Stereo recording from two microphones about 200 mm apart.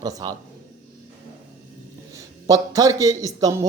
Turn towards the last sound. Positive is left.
turn(degrees=-15)  # may be behind; listen again after turning